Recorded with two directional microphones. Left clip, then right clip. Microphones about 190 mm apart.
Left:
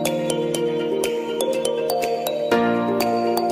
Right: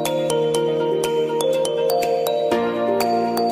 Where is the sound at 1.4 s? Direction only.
Centre (ahead or behind).